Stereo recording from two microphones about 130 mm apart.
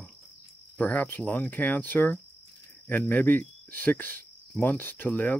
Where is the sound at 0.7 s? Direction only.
10° left (ahead or behind).